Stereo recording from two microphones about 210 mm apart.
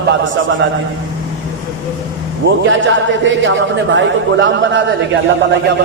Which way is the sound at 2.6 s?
60° right (ahead or behind).